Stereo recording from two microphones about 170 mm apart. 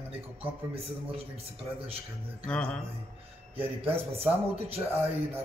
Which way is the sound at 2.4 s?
5° left (ahead or behind).